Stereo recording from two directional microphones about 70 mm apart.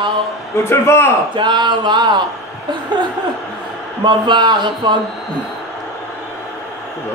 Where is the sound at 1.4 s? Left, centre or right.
Right.